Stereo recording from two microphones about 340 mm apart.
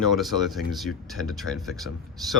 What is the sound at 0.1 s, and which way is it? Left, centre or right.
Speech, centre.